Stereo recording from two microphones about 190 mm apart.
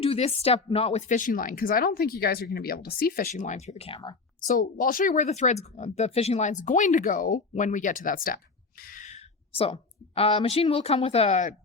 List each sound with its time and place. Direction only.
0.0 s speech: 30° left (ahead or behind)
4.4 s a woman's voice: 45° left (ahead or behind)